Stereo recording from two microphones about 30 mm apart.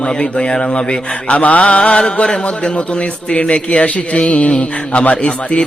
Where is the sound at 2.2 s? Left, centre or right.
Left.